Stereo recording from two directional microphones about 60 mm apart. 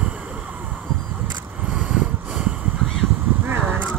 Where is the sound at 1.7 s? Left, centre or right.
Centre.